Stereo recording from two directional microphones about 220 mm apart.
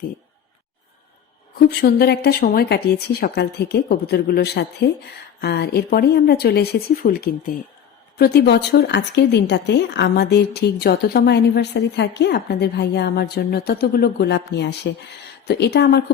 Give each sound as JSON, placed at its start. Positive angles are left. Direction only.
{"t": 1.5, "sound": "speech", "side_deg": 45}